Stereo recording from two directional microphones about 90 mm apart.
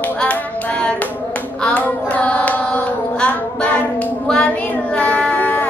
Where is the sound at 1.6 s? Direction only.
10° left (ahead or behind).